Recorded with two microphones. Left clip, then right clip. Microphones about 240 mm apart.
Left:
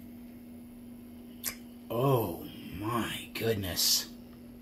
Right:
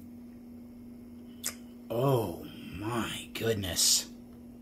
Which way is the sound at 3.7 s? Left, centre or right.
Right.